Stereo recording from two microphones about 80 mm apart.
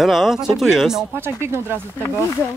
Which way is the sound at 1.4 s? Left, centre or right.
Right.